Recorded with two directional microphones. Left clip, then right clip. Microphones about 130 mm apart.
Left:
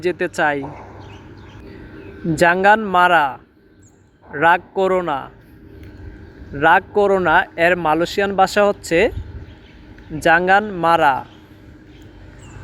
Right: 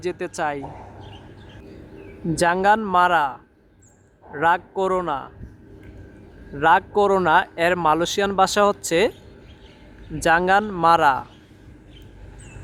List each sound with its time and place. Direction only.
0.0 s a man's voice: 15° left (ahead or behind)
2.4 s a man's voice: 15° left (ahead or behind)
6.6 s a man's voice: 10° left (ahead or behind)
10.2 s speech: 5° left (ahead or behind)